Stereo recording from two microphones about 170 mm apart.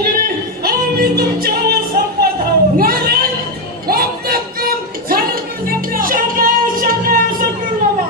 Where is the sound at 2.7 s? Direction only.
60° right (ahead or behind).